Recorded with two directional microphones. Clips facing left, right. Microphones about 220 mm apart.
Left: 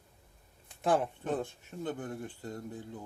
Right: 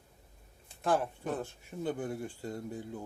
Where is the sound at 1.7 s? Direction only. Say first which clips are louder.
Right 2 dB; 10° right (ahead or behind).